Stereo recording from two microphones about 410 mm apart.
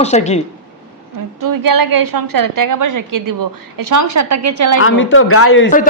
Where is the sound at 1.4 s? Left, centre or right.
Right.